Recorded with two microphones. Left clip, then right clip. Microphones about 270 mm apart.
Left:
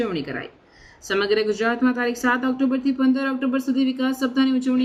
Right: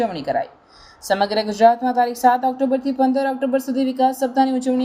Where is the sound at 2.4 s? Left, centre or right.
Centre.